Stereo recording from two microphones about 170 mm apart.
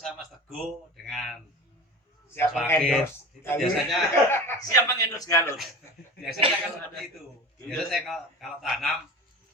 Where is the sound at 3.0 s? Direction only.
10° left (ahead or behind).